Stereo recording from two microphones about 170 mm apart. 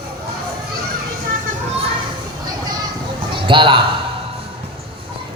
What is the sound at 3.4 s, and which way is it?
Speech, 30° right (ahead or behind).